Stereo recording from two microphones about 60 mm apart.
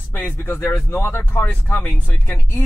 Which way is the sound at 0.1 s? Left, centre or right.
Left.